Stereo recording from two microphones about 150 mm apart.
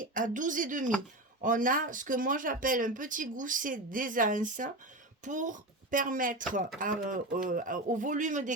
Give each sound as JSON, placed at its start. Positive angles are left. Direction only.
{"t": 0.0, "sound": "speech", "side_deg": -60}